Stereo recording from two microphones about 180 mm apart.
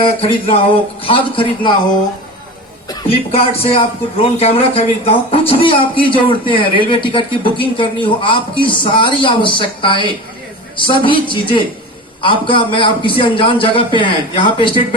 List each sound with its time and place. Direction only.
0.0 s a man's voice: 30° left (ahead or behind)
2.9 s a man's voice: 30° left (ahead or behind)